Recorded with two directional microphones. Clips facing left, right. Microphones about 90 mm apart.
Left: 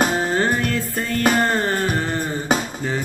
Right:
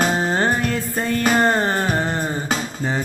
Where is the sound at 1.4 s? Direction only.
20° right (ahead or behind).